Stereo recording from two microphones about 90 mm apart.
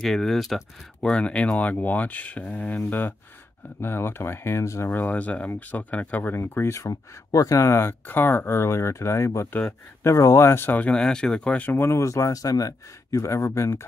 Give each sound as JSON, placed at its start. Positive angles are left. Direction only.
{"t": 0.0, "sound": "speech", "side_deg": 5}
{"t": 6.9, "sound": "speech", "side_deg": 45}
{"t": 11.7, "sound": "speech", "side_deg": 30}